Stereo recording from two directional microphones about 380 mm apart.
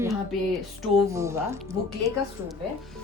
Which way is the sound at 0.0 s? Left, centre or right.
Centre.